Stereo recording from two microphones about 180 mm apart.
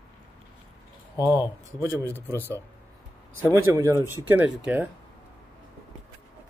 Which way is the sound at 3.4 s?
15° right (ahead or behind).